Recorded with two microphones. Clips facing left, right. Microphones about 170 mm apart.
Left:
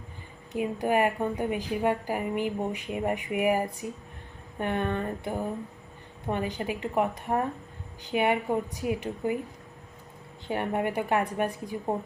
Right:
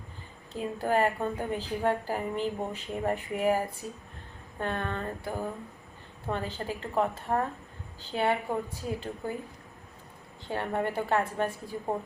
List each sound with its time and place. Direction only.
0.5 s a woman's voice: 15° left (ahead or behind)
10.4 s a woman's voice: 15° left (ahead or behind)